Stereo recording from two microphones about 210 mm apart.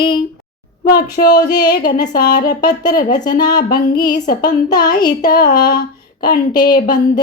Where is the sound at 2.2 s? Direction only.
50° left (ahead or behind).